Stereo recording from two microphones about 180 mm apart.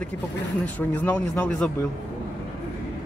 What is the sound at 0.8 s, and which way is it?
Speech, 10° left (ahead or behind).